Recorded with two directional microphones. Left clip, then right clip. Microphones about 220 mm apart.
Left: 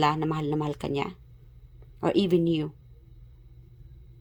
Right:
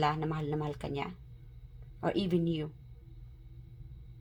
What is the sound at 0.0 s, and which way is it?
Speech, 40° left (ahead or behind).